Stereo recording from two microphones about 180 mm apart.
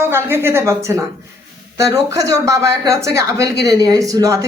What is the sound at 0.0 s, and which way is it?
A woman's voice, 15° right (ahead or behind).